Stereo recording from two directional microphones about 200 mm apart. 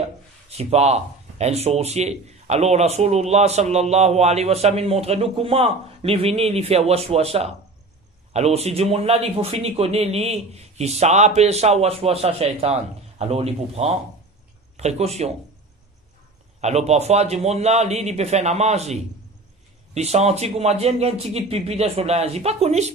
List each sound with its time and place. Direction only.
0.6 s a man's voice: 30° right (ahead or behind)
16.6 s a man's voice: 35° right (ahead or behind)